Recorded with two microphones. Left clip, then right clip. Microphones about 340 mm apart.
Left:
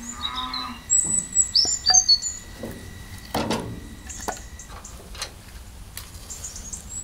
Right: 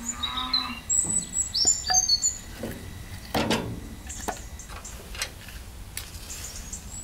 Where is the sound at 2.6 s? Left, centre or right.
Centre.